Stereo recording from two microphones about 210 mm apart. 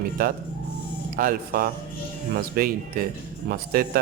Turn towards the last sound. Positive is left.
turn(degrees=-45)  # may be behind; listen again after turning